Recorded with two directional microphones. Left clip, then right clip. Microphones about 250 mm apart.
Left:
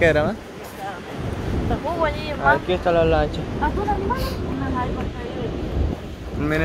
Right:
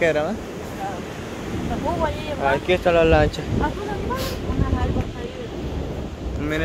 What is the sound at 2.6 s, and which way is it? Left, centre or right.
Speech, right.